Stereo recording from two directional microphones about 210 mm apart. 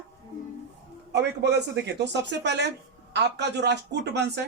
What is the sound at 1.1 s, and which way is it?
Speech, 55° right (ahead or behind).